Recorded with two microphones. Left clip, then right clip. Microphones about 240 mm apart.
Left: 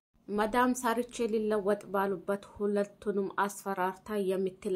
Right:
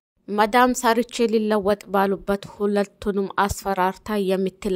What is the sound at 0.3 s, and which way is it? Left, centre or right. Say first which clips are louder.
A woman's voice: right 11 dB; right.